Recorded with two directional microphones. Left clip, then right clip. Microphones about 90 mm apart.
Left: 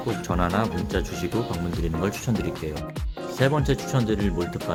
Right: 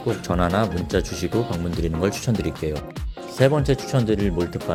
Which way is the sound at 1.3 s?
Centre (ahead or behind).